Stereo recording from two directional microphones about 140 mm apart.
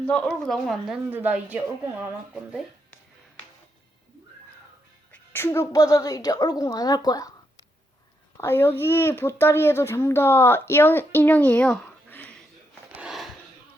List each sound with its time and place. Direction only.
0.0 s speech: 5° left (ahead or behind)
1.1 s speech: 10° right (ahead or behind)
5.1 s speech: 15° left (ahead or behind)
8.4 s speech: 15° left (ahead or behind)
13.0 s a sound: centre (ahead or behind)